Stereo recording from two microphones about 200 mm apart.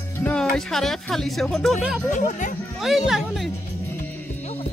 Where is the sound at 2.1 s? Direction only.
40° left (ahead or behind).